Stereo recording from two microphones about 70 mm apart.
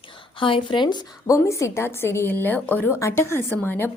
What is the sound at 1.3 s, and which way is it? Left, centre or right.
A woman's voice, left.